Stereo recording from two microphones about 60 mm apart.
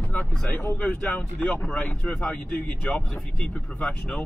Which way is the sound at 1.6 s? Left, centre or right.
Centre.